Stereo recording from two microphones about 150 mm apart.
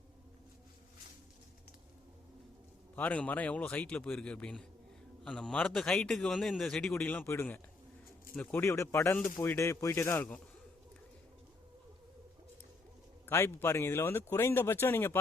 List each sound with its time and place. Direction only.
2.9 s a man's voice: 10° left (ahead or behind)
13.2 s speech: 15° left (ahead or behind)